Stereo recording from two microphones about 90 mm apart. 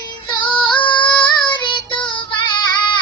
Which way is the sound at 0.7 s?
60° left (ahead or behind).